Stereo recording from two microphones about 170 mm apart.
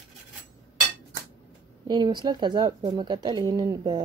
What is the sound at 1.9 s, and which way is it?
Speech, 25° right (ahead or behind).